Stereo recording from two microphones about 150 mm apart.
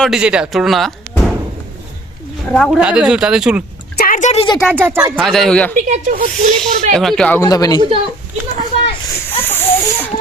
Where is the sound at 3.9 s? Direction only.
65° left (ahead or behind).